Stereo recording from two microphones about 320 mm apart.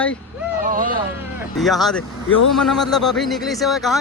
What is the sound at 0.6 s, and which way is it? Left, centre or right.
Vehicle, right.